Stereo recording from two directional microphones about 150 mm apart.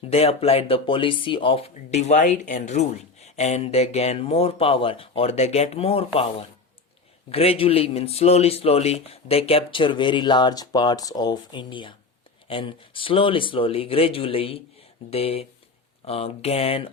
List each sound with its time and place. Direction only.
0.1 s speech: 45° left (ahead or behind)
7.3 s a man's voice: 40° left (ahead or behind)